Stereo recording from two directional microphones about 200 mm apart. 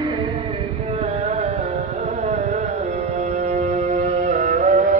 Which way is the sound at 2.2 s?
35° right (ahead or behind).